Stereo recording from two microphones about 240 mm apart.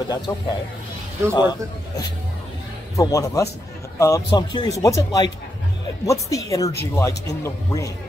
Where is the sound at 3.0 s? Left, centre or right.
Centre.